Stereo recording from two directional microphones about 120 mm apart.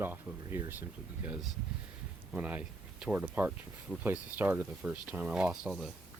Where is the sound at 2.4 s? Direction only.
15° right (ahead or behind).